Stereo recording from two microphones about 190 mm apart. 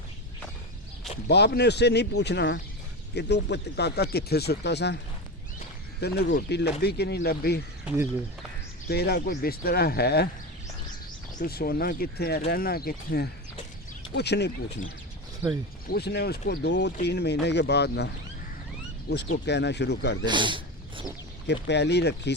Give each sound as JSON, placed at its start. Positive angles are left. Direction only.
{"t": 1.3, "sound": "speech", "side_deg": 60}
{"t": 6.0, "sound": "speech", "side_deg": 60}
{"t": 8.9, "sound": "speech", "side_deg": 55}
{"t": 11.3, "sound": "speech", "side_deg": 55}
{"t": 15.4, "sound": "speech", "side_deg": -10}
{"t": 15.9, "sound": "speech", "side_deg": 60}
{"t": 19.1, "sound": "speech", "side_deg": 65}
{"t": 20.2, "sound": "a sound", "side_deg": -25}
{"t": 21.4, "sound": "speech", "side_deg": 65}